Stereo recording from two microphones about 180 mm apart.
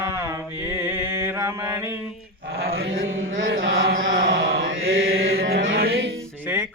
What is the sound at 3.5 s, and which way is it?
Chant, 75° right (ahead or behind).